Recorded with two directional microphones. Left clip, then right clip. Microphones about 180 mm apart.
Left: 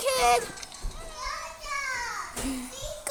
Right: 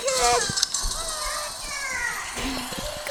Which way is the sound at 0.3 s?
25° right (ahead or behind).